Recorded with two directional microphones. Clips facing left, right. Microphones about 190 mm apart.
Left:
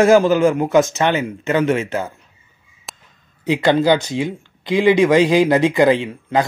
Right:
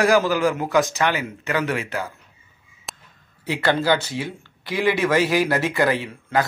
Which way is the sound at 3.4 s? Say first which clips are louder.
Left 6 dB; 20° left (ahead or behind).